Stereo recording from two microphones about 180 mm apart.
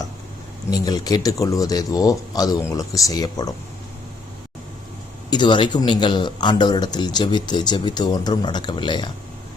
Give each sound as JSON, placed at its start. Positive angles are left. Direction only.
{"t": 0.7, "sound": "a man's voice", "side_deg": 20}
{"t": 5.3, "sound": "a man's voice", "side_deg": 25}